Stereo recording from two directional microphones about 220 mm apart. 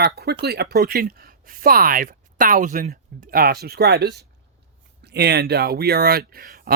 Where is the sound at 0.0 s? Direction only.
45° right (ahead or behind).